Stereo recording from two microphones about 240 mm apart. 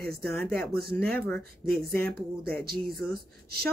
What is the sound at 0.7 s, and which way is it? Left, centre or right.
Speech, right.